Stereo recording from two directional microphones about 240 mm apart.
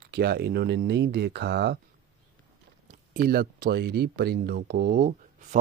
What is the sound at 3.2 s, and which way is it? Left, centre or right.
Speech, right.